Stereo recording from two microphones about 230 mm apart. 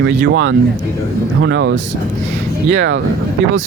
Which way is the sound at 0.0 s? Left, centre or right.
Right.